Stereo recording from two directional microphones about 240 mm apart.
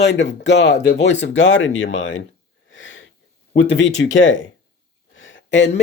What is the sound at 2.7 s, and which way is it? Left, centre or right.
Wheeze, left.